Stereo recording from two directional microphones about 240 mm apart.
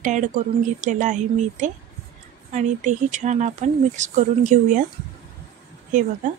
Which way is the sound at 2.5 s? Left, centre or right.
Right.